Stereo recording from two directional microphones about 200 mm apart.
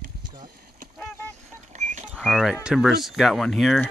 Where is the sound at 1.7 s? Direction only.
35° right (ahead or behind).